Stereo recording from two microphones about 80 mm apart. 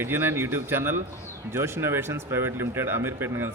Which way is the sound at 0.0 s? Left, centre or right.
Right.